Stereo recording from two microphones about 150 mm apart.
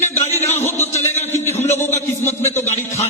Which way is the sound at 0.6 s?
15° left (ahead or behind).